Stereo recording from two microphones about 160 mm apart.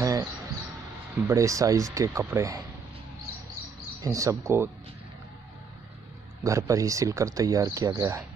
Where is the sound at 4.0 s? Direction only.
20° right (ahead or behind).